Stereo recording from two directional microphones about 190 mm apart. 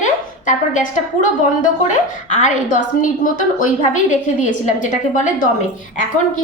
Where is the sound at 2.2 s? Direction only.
40° left (ahead or behind).